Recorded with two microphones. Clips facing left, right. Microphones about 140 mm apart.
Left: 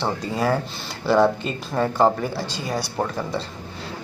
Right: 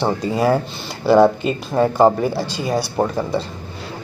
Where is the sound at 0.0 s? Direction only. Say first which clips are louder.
Right 5 dB; 15° right (ahead or behind).